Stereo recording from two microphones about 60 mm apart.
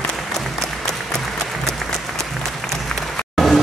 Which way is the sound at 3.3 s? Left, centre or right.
Centre.